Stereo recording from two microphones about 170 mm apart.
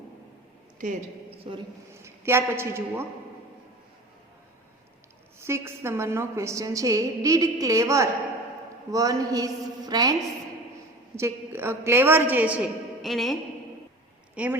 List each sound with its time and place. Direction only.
1.5 s a man's voice: 35° right (ahead or behind)
1.9 s a man's voice: 15° right (ahead or behind)
5.4 s a woman's voice: 15° right (ahead or behind); by 13.3 s centre (ahead or behind)
14.3 s a woman's voice: 10° right (ahead or behind)